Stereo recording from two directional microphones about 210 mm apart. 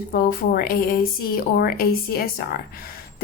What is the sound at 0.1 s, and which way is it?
A woman's voice, 45° left (ahead or behind).